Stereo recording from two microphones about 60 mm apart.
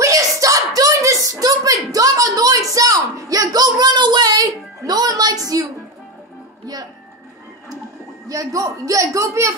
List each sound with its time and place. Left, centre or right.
0.0 s a sound: right
6.6 s speech: right
8.3 s a man's voice: right